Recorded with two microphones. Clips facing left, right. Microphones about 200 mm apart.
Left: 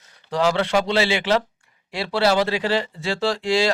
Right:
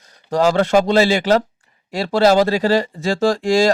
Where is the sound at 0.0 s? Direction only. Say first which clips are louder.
Right 4 dB; 45° right (ahead or behind).